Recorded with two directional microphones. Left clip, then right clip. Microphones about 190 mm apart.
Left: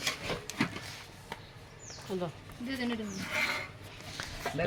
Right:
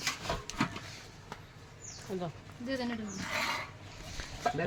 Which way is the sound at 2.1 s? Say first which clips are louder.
Left 3 dB; 25° left (ahead or behind).